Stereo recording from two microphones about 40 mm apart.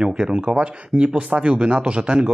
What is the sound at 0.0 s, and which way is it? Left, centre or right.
Speech, right.